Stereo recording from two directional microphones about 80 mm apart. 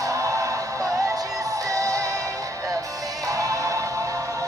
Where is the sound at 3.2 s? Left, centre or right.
Right.